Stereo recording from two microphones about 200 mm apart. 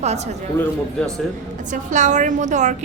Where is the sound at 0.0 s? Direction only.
35° right (ahead or behind).